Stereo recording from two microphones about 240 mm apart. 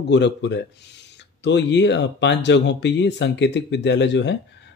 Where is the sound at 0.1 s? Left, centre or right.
Left.